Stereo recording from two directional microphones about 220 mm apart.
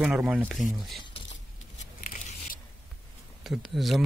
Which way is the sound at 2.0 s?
35° left (ahead or behind).